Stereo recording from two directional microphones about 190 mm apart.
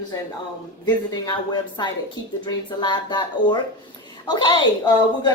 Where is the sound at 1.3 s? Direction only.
25° left (ahead or behind).